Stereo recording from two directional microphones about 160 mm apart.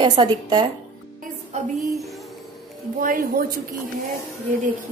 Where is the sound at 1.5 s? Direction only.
45° right (ahead or behind).